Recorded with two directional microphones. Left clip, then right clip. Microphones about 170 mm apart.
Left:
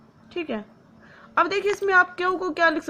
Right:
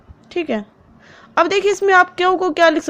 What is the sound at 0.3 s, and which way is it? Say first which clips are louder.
A woman's voice: right 9 dB; 35° right (ahead or behind).